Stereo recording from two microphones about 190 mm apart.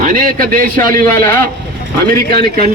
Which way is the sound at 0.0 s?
45° right (ahead or behind).